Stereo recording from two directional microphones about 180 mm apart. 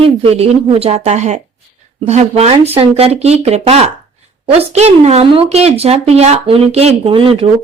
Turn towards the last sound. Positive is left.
turn(degrees=-30)  # may be behind; listen again after turning